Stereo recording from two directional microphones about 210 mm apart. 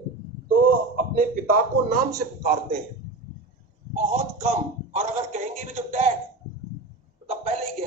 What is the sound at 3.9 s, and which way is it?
A man's voice, 35° right (ahead or behind).